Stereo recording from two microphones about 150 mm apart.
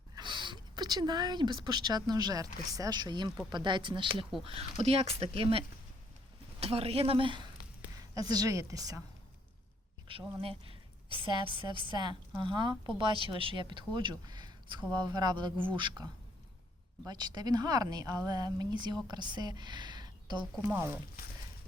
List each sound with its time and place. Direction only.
0.2 s speech: 30° right (ahead or behind)
7.9 s a woman's voice: 25° right (ahead or behind)
10.7 s a woman's voice: 35° right (ahead or behind)
17.1 s speech: 25° right (ahead or behind)
20.6 s speech: 15° right (ahead or behind)